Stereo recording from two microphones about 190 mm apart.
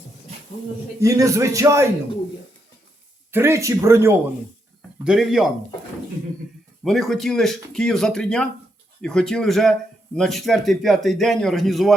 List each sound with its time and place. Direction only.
0.9 s a man's voice: 15° right (ahead or behind)
3.3 s a man's voice: 15° right (ahead or behind)
5.0 s speech: centre (ahead or behind)
6.8 s speech: centre (ahead or behind)